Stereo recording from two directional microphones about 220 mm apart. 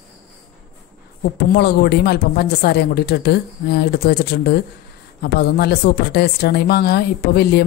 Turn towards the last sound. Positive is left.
turn(degrees=45)  # may be behind; listen again after turning